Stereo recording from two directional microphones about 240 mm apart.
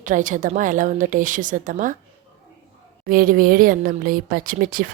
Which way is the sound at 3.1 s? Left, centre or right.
Right.